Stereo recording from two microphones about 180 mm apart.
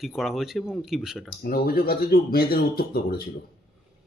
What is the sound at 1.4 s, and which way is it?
Speech, 55° left (ahead or behind).